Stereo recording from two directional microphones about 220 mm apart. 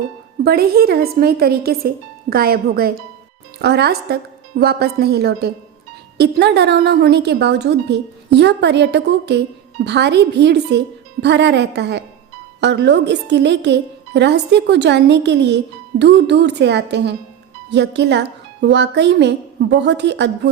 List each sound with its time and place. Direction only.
0.4 s speech: 45° right (ahead or behind)